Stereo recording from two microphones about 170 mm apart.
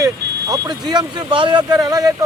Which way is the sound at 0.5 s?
25° right (ahead or behind).